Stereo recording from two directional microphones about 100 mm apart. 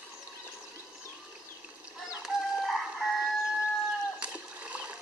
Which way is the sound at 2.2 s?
Centre (ahead or behind).